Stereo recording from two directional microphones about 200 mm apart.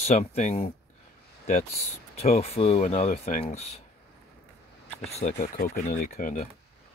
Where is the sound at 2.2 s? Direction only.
30° left (ahead or behind).